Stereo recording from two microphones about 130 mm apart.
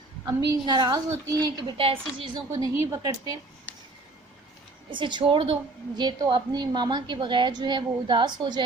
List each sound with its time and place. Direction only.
0.3 s a woman's voice: 30° right (ahead or behind)
1.8 s a woman's voice: 45° right (ahead or behind)
2.5 s a woman's voice: 25° right (ahead or behind)
4.9 s a woman's voice: 40° right (ahead or behind)